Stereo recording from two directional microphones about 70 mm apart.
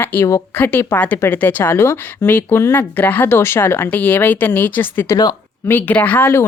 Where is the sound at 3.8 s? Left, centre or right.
Left.